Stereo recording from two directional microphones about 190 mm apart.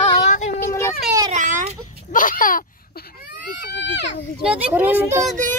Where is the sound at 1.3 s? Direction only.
40° right (ahead or behind).